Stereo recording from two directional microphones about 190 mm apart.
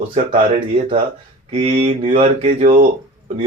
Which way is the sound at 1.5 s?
30° right (ahead or behind).